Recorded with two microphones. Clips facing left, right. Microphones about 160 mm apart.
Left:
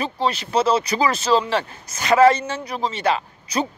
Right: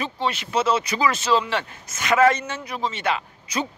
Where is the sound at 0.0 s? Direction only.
35° left (ahead or behind).